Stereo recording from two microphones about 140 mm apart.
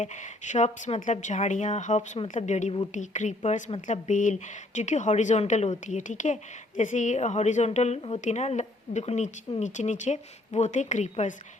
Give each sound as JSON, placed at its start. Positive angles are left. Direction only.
{"t": 0.0, "sound": "a woman's voice", "side_deg": 60}